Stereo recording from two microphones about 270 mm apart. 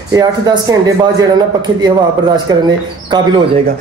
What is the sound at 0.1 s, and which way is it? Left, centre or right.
Speech, centre.